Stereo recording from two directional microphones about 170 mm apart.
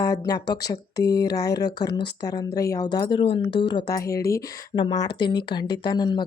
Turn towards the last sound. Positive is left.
turn(degrees=25)  # may be behind; listen again after turning